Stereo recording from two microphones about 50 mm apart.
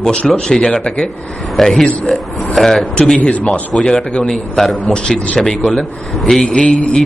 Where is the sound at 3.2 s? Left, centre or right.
Left.